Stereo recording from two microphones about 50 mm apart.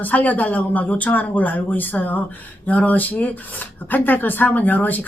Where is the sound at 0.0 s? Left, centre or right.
Left.